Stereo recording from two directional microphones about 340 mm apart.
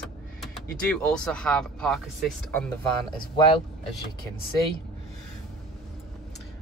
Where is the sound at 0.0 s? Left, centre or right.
Centre.